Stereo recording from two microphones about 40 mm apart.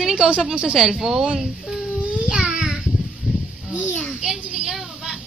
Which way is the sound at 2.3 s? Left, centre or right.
Right.